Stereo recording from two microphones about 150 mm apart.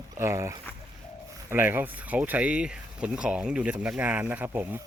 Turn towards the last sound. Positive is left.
turn(degrees=-15)  # may be behind; listen again after turning